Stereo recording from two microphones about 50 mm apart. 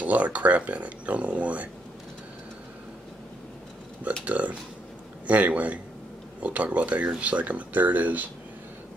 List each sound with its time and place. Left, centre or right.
0.0 s speech: right
4.2 s speech: right